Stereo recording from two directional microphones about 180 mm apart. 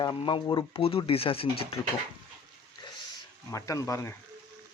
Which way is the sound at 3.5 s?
20° left (ahead or behind).